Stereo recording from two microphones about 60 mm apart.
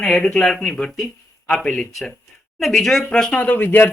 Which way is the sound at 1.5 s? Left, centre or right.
Centre.